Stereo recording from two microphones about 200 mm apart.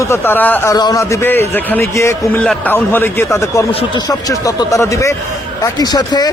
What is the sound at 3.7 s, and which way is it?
A man's voice, 25° left (ahead or behind).